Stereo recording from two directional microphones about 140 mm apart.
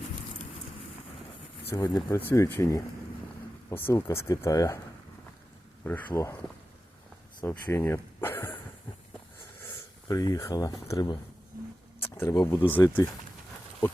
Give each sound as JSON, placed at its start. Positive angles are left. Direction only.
{"t": 1.7, "sound": "speech", "side_deg": 30}
{"t": 5.8, "sound": "speech", "side_deg": 10}
{"t": 7.4, "sound": "speech", "side_deg": 20}
{"t": 10.1, "sound": "speech", "side_deg": 25}
{"t": 12.7, "sound": "speech", "side_deg": 15}